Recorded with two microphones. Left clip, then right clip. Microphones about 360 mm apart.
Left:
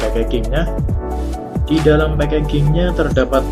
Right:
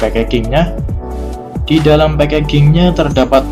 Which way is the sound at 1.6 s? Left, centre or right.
Right.